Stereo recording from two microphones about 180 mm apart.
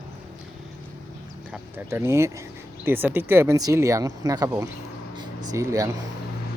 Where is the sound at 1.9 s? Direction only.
15° right (ahead or behind).